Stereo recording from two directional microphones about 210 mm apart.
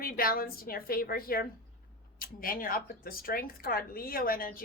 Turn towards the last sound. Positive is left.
turn(degrees=45)  # may be behind; listen again after turning